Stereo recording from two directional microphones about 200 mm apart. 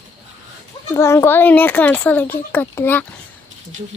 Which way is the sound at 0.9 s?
15° left (ahead or behind).